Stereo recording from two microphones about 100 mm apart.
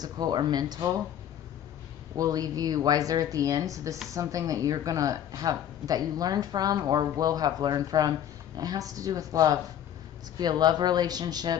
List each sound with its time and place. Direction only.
0.0 s speech: 45° right (ahead or behind)
2.1 s speech: 40° right (ahead or behind)